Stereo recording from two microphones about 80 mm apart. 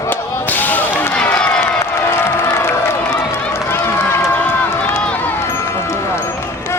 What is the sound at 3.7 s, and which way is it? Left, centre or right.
Run, left.